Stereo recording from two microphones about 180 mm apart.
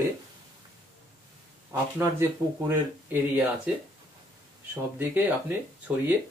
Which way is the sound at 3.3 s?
10° right (ahead or behind).